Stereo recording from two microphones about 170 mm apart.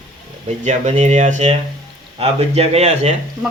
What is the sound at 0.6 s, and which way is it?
Speech, 45° right (ahead or behind).